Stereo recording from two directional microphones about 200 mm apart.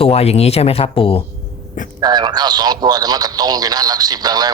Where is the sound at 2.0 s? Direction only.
20° right (ahead or behind).